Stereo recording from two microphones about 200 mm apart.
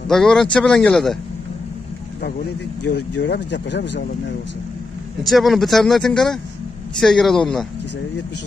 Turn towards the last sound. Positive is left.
turn(degrees=0)  # may be behind; listen again after turning